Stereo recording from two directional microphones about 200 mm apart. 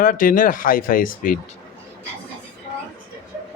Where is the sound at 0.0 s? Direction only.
45° left (ahead or behind).